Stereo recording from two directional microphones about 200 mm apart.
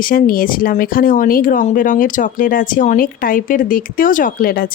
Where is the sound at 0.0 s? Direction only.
45° left (ahead or behind).